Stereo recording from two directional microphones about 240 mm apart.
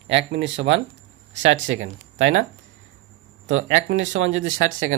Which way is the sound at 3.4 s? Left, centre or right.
Right.